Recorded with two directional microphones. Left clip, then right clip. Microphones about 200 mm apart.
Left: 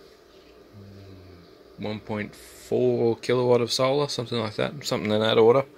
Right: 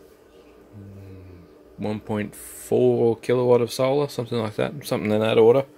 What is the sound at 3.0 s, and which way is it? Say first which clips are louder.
Speech: right 3 dB; 5° right (ahead or behind).